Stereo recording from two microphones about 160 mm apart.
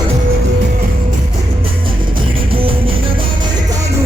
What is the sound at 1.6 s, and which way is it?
Music, 30° right (ahead or behind).